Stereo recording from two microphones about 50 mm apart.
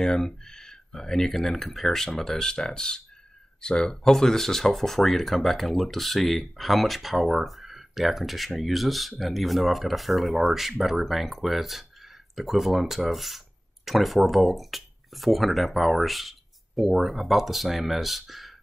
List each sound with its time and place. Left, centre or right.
0.0 s speech: centre